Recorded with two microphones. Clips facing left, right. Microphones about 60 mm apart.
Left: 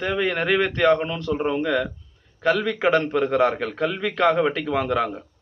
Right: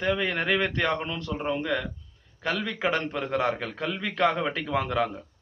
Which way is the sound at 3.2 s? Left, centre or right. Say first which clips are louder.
Left 7 dB; centre.